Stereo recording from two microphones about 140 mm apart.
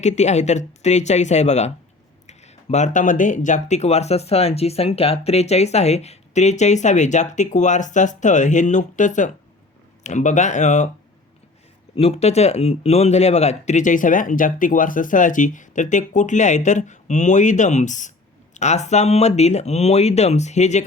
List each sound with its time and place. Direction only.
0.0 s speech: 55° left (ahead or behind)
11.9 s speech: 50° left (ahead or behind)